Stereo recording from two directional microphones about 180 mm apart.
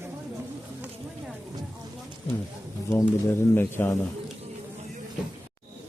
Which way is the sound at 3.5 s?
10° left (ahead or behind).